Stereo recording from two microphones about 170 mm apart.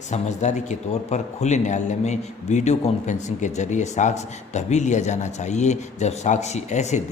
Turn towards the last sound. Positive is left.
turn(degrees=45)  # may be behind; listen again after turning